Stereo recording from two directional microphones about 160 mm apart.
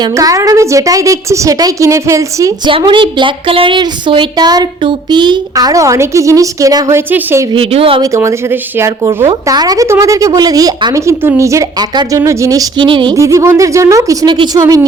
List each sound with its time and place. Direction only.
0.0 s a woman's voice: 20° right (ahead or behind)
2.6 s a woman's voice: 30° right (ahead or behind); by 7.4 s 15° right (ahead or behind)
7.5 s speech: 35° right (ahead or behind)
8.0 s a woman's voice: 20° right (ahead or behind)
13.1 s a woman's voice: 20° right (ahead or behind)